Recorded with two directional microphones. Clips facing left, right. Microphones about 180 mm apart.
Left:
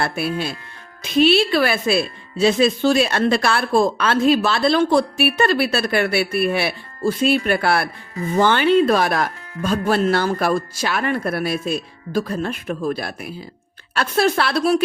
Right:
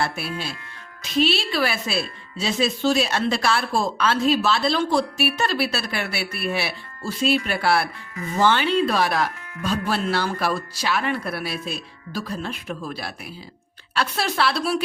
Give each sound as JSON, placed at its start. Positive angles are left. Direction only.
{"t": 0.0, "sound": "a woman's voice", "side_deg": 55}